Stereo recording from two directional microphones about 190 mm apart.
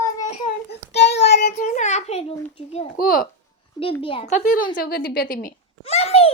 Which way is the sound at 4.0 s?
30° left (ahead or behind).